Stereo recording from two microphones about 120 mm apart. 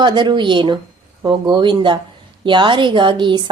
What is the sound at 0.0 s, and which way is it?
A woman's voice, 40° right (ahead or behind).